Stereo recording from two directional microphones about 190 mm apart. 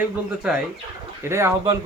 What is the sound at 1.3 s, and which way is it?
Speech, 15° right (ahead or behind).